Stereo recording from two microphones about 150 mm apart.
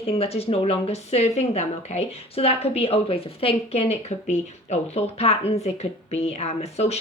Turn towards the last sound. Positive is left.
turn(degrees=45)  # may be behind; listen again after turning